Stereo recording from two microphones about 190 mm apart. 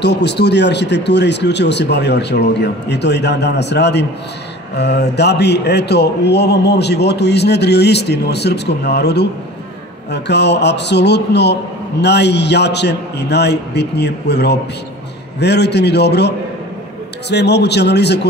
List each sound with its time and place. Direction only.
0.0 s a man's voice: 65° left (ahead or behind)